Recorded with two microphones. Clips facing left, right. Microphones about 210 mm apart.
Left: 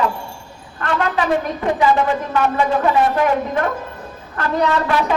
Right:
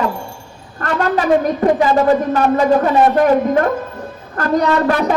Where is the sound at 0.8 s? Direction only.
45° right (ahead or behind).